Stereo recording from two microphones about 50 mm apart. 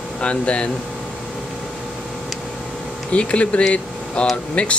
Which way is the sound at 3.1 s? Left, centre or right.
Left.